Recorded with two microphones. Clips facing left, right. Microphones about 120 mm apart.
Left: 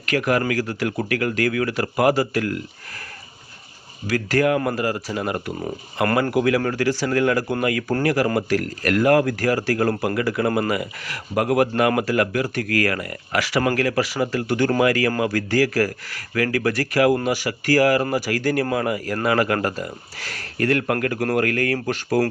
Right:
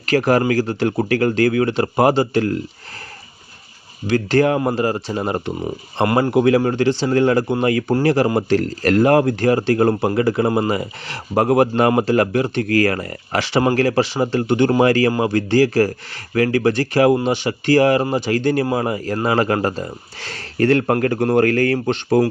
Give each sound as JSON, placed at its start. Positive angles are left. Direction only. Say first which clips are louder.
{"t": 0.0, "sound": "speech", "louder": "right 5 dB", "side_deg": -30}
{"t": 4.0, "sound": "speech", "louder": "right 4 dB", "side_deg": -25}